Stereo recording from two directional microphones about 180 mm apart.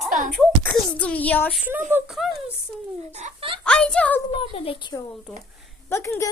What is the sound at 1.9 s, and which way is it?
Speech, 10° right (ahead or behind).